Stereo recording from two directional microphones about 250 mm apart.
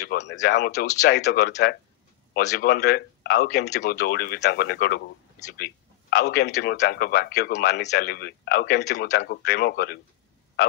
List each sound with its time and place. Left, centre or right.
0.0 s a man's voice: left